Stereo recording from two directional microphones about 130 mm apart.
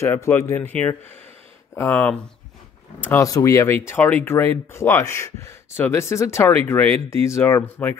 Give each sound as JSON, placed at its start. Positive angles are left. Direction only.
{"t": 0.0, "sound": "speech", "side_deg": 20}
{"t": 3.3, "sound": "speech", "side_deg": 25}